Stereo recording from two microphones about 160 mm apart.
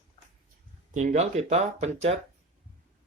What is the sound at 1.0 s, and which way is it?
Speech, 45° right (ahead or behind).